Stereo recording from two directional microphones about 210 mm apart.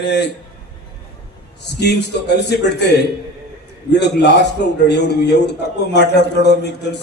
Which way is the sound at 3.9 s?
55° left (ahead or behind).